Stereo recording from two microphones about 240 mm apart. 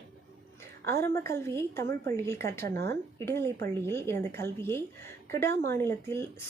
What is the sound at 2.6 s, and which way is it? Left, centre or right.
Speech, right.